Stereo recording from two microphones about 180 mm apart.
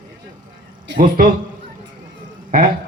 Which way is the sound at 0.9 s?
50° right (ahead or behind).